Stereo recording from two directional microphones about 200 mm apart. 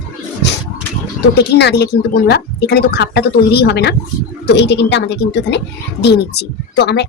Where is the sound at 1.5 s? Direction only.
55° left (ahead or behind).